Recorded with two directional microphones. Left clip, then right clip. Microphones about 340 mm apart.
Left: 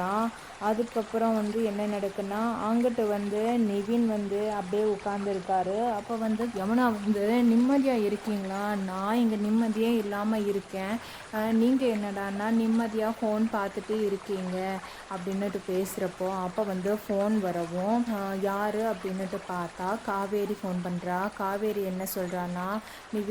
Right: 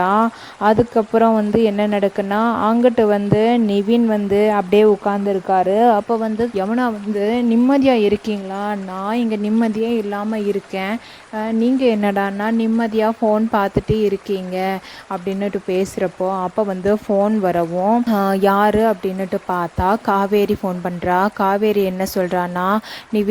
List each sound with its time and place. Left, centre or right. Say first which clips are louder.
0.0 s speech: right 13 dB; right